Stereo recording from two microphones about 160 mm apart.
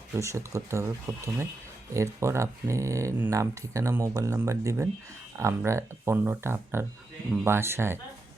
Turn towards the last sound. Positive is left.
turn(degrees=-15)  # may be behind; listen again after turning